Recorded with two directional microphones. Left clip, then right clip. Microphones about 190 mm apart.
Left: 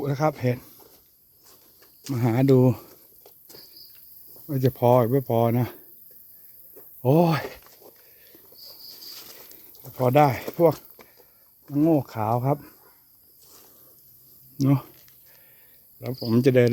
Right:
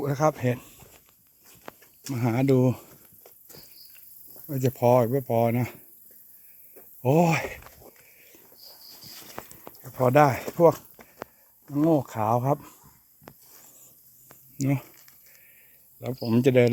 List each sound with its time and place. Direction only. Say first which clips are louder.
0.0 s speech: even; 10° left (ahead or behind)
2.1 s speech: left 3 dB; 25° left (ahead or behind)
4.4 s speech: left 2 dB; 30° left (ahead or behind)
7.0 s speech: left 1 dB; 35° left (ahead or behind)
9.1 s a sound: right 3 dB; 50° right (ahead or behind)
10.0 s speech: even; 10° left (ahead or behind)
11.7 s speech: left 1 dB; 25° left (ahead or behind)
14.6 s speech: left 5 dB; 45° left (ahead or behind)
16.0 s speech: left 1 dB; 15° left (ahead or behind)